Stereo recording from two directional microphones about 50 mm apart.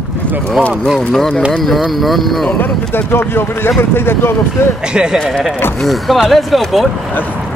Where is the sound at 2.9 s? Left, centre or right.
Left.